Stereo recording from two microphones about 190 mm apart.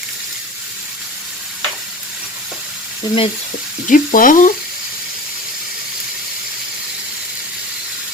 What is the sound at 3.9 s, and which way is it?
Sizzle, 45° left (ahead or behind).